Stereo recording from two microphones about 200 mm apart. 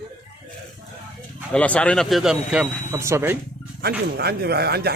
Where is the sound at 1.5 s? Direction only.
5° left (ahead or behind); by 3.4 s 10° right (ahead or behind).